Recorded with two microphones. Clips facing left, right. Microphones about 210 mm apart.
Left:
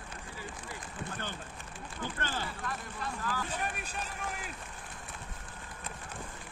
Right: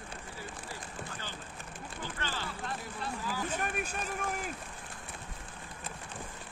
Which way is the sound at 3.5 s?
50° right (ahead or behind).